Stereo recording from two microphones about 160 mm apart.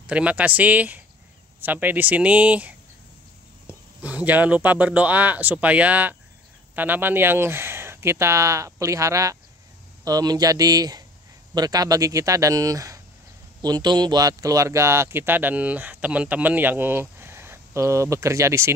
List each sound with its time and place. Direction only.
0.0 s speech: 10° right (ahead or behind)